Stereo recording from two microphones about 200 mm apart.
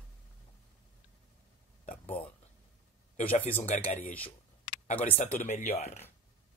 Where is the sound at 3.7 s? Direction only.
35° left (ahead or behind).